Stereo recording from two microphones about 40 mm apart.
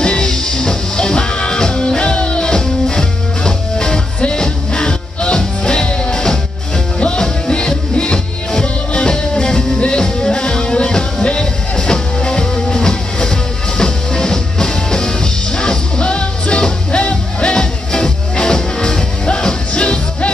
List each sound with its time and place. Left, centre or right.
0.0 s music: centre